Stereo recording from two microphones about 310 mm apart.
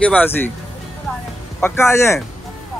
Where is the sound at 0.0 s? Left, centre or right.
Centre.